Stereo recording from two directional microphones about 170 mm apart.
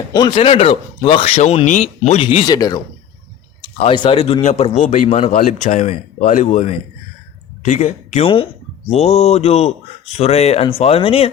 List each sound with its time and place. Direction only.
0.1 s speech: 25° left (ahead or behind)
3.6 s speech: 35° left (ahead or behind)
5.3 s speech: 50° left (ahead or behind); by 11.3 s 35° left (ahead or behind)